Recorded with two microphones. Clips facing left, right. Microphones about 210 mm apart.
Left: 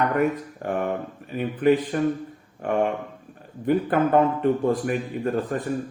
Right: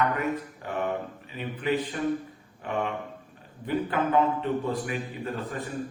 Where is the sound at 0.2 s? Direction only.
50° left (ahead or behind).